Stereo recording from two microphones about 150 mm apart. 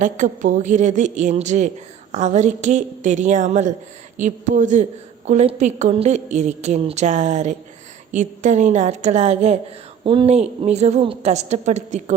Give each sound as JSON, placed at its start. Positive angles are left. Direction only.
{"t": 0.0, "sound": "a woman's voice", "side_deg": -55}
{"t": 10.0, "sound": "a woman's voice", "side_deg": -35}